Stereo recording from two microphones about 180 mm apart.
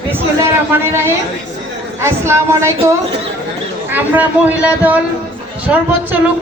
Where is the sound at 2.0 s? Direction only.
15° right (ahead or behind).